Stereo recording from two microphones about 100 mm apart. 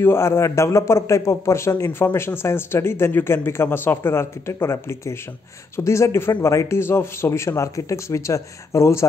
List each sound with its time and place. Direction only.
0.0 s a man's voice: 25° left (ahead or behind)